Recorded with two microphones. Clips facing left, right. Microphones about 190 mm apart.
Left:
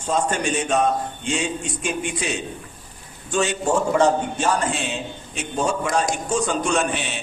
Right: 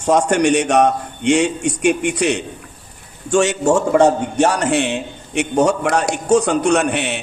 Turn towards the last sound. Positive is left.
turn(degrees=-65)  # may be behind; listen again after turning